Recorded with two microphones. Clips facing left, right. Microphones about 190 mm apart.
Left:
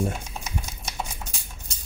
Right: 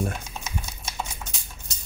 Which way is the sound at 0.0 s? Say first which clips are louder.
Left 2 dB; 10° left (ahead or behind).